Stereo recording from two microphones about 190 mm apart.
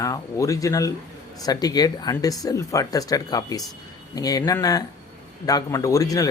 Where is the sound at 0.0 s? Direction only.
15° left (ahead or behind).